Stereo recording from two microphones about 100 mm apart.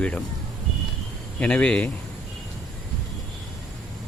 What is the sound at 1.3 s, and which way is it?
Speech, 10° left (ahead or behind).